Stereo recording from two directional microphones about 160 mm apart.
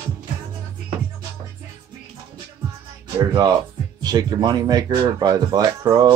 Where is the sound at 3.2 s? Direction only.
25° right (ahead or behind).